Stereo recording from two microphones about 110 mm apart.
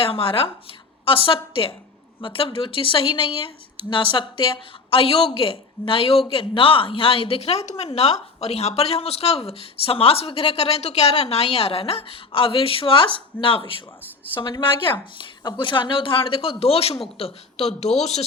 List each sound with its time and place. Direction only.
0.0 s speech: 55° left (ahead or behind); by 7.9 s 85° left
7.9 s speech: 70° left (ahead or behind)